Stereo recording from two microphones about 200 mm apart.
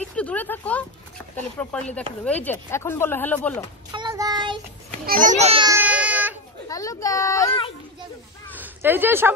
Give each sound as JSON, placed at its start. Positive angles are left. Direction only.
{"t": 0.1, "sound": "speech", "side_deg": 5}
{"t": 3.9, "sound": "child singing", "side_deg": -20}
{"t": 5.0, "sound": "a child's voice", "side_deg": -45}
{"t": 5.7, "sound": "baby cry", "side_deg": -10}
{"t": 6.7, "sound": "speech", "side_deg": 15}
{"t": 8.5, "sound": "speech", "side_deg": -10}